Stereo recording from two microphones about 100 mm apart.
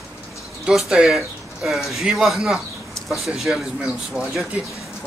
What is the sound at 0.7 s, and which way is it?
Speech, 5° right (ahead or behind).